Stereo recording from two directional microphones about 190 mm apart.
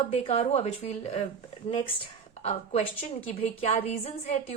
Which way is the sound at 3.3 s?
35° left (ahead or behind).